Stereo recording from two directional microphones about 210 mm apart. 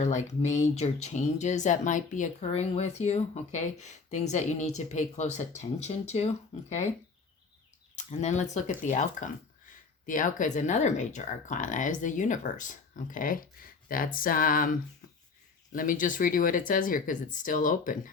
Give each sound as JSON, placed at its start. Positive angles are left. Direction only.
{"t": 0.0, "sound": "speech", "side_deg": 35}
{"t": 7.9, "sound": "speech", "side_deg": 35}